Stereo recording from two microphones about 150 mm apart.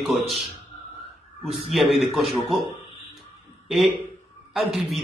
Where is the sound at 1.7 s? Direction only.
Centre (ahead or behind).